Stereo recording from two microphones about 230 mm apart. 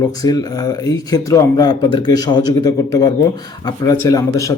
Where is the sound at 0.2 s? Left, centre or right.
Centre.